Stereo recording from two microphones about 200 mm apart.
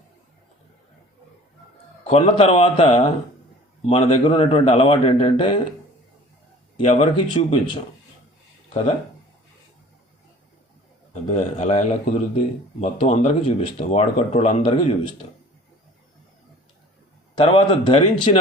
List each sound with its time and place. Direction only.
2.0 s a man's voice: 30° left (ahead or behind)
6.8 s a man's voice: 35° left (ahead or behind)
11.1 s a man's voice: 30° left (ahead or behind)
17.3 s a man's voice: 25° left (ahead or behind)